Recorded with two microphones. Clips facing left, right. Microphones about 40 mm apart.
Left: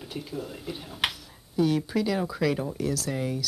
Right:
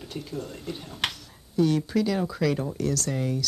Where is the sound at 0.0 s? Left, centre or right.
Centre.